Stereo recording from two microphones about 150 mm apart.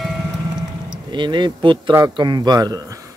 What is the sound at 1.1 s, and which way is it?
Speech, 30° right (ahead or behind).